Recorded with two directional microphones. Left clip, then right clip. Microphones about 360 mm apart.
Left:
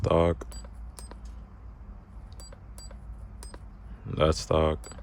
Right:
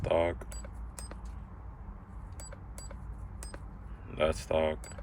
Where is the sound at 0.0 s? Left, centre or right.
Left.